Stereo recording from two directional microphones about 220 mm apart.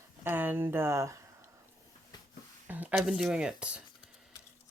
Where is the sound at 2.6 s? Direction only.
10° right (ahead or behind).